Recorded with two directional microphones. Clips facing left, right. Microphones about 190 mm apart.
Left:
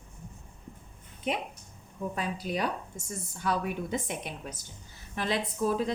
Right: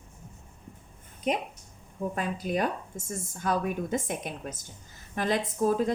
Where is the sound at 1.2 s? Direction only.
40° right (ahead or behind).